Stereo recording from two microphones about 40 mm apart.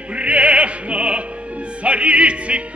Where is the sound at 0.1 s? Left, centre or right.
Right.